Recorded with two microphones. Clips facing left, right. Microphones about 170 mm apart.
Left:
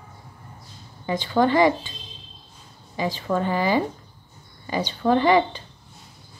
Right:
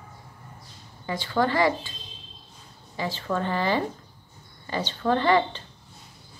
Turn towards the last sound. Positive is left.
turn(degrees=15)  # may be behind; listen again after turning